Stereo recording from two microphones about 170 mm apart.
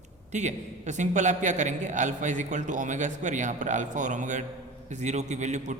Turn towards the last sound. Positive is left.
turn(degrees=-45)  # may be behind; listen again after turning